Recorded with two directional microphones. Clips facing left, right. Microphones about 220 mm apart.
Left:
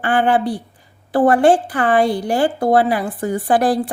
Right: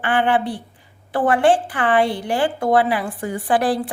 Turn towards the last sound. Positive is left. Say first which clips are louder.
# left 3 dB
turn(degrees=40)  # may be behind; listen again after turning